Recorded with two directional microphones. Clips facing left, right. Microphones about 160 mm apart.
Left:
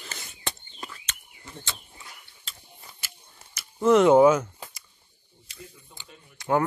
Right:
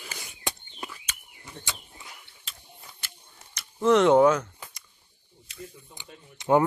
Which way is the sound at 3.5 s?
5° left (ahead or behind).